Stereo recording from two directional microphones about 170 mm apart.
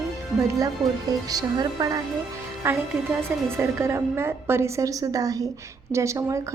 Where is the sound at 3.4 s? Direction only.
15° right (ahead or behind).